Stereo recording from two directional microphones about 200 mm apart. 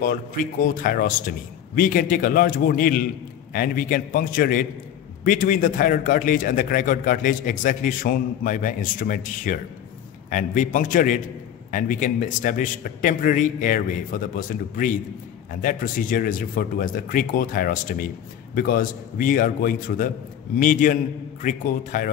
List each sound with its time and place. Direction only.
0.0 s a man's voice: 45° left (ahead or behind)